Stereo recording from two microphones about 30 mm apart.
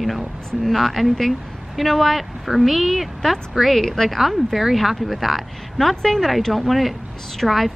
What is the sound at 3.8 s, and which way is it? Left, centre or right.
Speech, centre.